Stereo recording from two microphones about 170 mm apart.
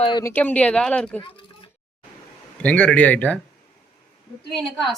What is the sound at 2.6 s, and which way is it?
Speech, 5° left (ahead or behind).